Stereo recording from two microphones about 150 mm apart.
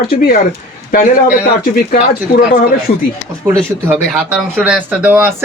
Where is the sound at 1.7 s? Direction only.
85° left.